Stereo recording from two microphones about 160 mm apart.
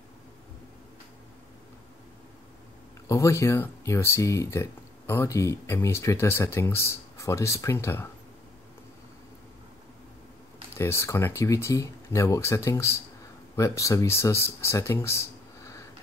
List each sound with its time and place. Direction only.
3.1 s speech: 20° left (ahead or behind)
10.7 s speech: 15° left (ahead or behind)